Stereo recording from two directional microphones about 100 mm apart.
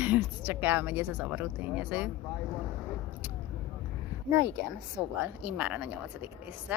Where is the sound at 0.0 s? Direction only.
15° right (ahead or behind).